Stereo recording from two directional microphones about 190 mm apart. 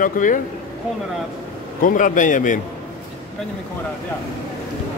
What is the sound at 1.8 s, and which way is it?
Speech, 45° left (ahead or behind).